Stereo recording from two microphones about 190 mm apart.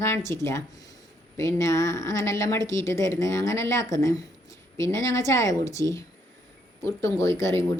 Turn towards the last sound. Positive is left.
turn(degrees=15)  # may be behind; listen again after turning